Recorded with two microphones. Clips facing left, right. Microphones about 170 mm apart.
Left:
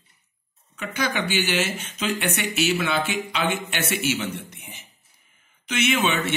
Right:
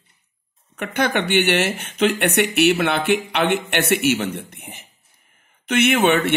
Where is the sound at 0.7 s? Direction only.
60° right (ahead or behind).